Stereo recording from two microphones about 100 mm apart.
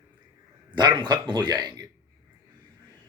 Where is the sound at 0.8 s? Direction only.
50° right (ahead or behind).